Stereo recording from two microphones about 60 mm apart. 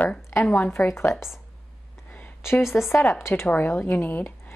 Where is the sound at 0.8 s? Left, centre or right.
Centre.